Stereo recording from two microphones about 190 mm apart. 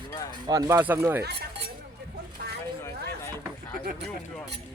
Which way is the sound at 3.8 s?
55° right (ahead or behind).